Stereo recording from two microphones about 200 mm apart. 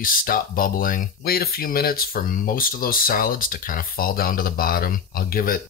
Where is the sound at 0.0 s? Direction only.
45° left (ahead or behind).